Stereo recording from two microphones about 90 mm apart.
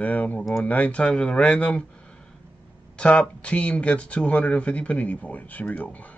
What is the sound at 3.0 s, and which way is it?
Speech, 10° left (ahead or behind).